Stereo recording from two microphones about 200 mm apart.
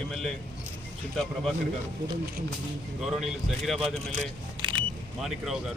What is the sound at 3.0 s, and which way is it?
Speech, centre (ahead or behind).